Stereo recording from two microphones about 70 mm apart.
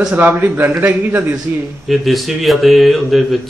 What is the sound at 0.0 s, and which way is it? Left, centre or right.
A man's voice, right.